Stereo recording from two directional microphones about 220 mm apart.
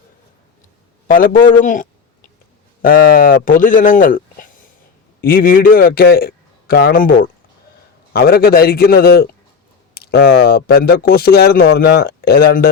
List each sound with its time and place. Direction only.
1.1 s a man's voice: 40° left (ahead or behind)